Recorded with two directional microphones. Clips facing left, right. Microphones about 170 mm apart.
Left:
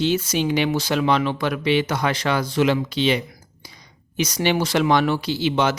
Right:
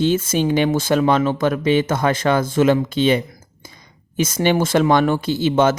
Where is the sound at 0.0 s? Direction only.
50° right (ahead or behind).